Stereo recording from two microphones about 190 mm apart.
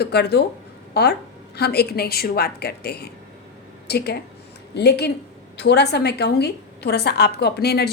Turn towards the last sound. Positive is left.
turn(degrees=55)  # may be behind; listen again after turning